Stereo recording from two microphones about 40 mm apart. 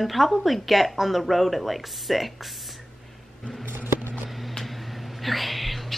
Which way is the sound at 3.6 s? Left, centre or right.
Right.